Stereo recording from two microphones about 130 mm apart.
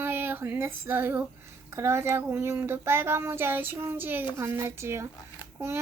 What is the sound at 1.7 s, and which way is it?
Speech, 20° right (ahead or behind).